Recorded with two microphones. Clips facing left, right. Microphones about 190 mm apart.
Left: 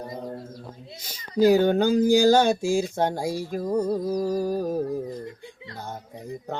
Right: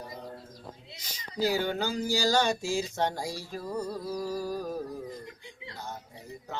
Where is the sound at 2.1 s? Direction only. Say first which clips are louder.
Left 5 dB; 55° left (ahead or behind).